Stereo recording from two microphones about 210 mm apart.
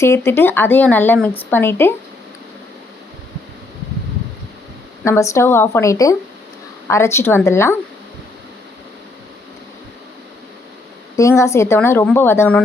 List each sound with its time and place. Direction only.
0.0 s a woman's voice: 10° left (ahead or behind)
5.0 s a woman's voice: 15° left (ahead or behind)
11.2 s a woman's voice: 15° left (ahead or behind)